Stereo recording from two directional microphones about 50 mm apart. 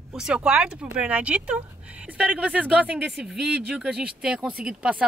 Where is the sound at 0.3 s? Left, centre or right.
Centre.